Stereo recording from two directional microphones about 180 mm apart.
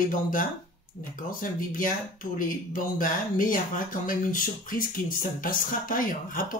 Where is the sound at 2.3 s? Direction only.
50° left (ahead or behind).